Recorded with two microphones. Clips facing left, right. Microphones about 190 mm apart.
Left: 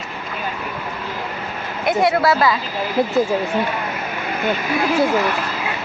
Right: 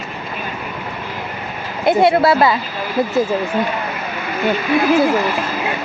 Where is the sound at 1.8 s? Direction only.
30° right (ahead or behind).